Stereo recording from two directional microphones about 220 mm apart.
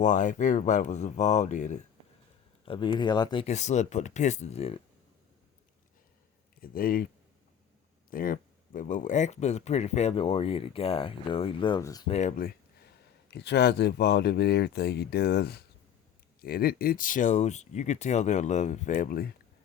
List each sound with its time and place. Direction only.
0.0 s speech: 35° left (ahead or behind)
2.6 s speech: 20° left (ahead or behind)
6.6 s speech: 40° left (ahead or behind)
8.1 s speech: 40° left (ahead or behind); by 12.1 s 15° left (ahead or behind)
12.1 s speech: 30° left (ahead or behind)
13.3 s speech: 50° left (ahead or behind)